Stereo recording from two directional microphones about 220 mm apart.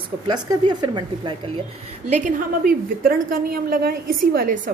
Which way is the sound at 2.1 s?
35° right (ahead or behind).